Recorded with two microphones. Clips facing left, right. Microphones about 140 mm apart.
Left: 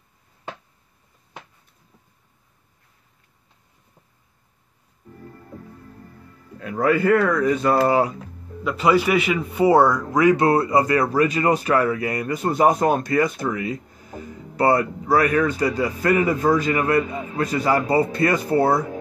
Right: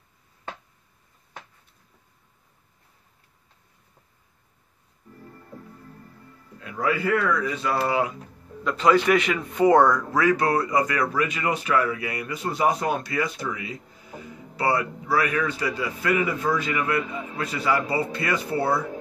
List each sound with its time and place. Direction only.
6.6 s speech: 50° left (ahead or behind)
8.6 s a man's voice: 10° left (ahead or behind); by 18.9 s 40° left (ahead or behind)